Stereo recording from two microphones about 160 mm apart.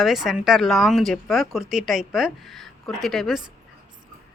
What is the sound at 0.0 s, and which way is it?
Speech, centre (ahead or behind).